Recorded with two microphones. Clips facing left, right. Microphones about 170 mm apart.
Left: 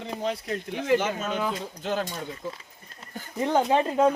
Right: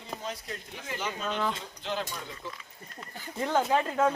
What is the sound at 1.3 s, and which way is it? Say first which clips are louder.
Speech: left 2 dB; 10° left (ahead or behind).